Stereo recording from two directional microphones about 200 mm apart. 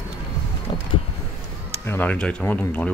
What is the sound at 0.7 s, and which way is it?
Vehicle, 25° left (ahead or behind).